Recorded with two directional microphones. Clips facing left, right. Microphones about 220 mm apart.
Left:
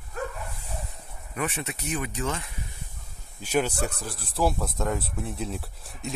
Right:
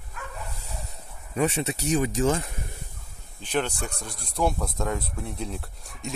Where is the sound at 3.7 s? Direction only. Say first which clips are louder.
Left 4 dB; 35° left (ahead or behind).